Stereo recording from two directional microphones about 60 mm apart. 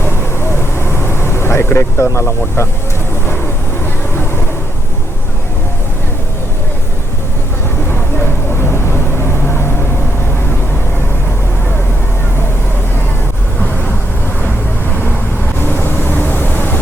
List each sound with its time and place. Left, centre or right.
0.0 s vehicle: left
7.9 s vehicle: left
14.4 s vehicle: left